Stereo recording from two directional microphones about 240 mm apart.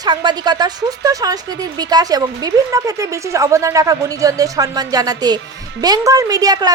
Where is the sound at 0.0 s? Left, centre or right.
Centre.